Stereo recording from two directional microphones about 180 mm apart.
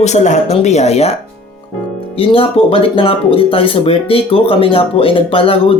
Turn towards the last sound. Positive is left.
turn(degrees=30)  # may be behind; listen again after turning